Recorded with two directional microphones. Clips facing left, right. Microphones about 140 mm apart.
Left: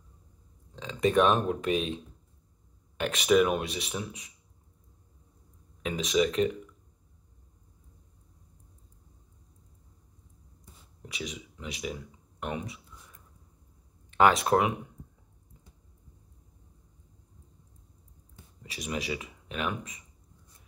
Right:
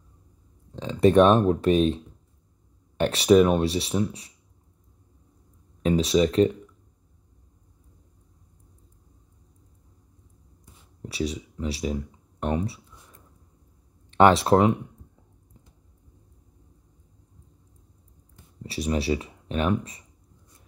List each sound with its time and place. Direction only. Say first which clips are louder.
0.7 s speech: right 7 dB; 35° right (ahead or behind)
3.0 s speech: right 6 dB; 35° right (ahead or behind)
5.8 s speech: right 6 dB; 35° right (ahead or behind)
11.0 s speech: right 10 dB; 35° right (ahead or behind)
14.1 s speech: right 5 dB; 35° right (ahead or behind)
18.6 s speech: right 8 dB; 35° right (ahead or behind)